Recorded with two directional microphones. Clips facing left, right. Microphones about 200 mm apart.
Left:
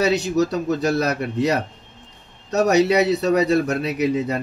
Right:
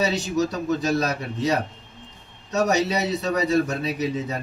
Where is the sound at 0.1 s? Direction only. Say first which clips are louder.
Left 4 dB; 65° left (ahead or behind).